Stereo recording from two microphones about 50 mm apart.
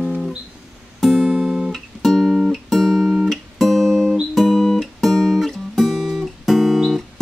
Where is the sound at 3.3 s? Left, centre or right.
Centre.